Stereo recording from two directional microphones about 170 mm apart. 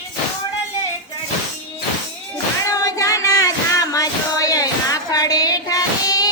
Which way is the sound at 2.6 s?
20° left (ahead or behind).